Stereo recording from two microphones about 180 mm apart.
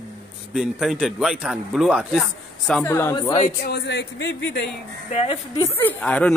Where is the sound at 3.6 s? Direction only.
65° left (ahead or behind).